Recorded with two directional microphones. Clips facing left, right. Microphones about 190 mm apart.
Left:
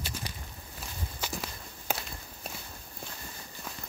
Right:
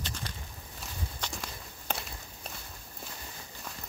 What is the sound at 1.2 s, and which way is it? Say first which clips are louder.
Walk: left 6 dB; 5° left (ahead or behind).